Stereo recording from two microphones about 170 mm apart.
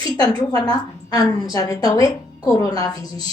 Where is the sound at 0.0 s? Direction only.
20° left (ahead or behind).